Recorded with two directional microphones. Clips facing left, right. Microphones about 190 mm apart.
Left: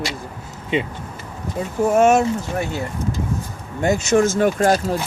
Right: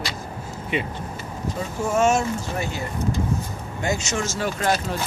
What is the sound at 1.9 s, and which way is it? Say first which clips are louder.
Speech: left 5 dB; 60° left (ahead or behind).